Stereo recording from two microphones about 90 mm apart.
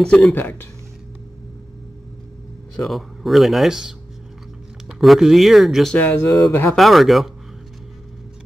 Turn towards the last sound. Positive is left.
turn(degrees=0)  # may be behind; listen again after turning